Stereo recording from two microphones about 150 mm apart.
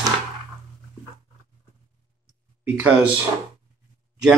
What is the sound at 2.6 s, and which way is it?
Speech, 10° right (ahead or behind).